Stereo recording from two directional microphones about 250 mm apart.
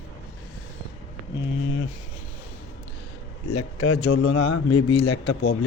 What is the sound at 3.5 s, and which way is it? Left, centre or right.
A man's voice, left.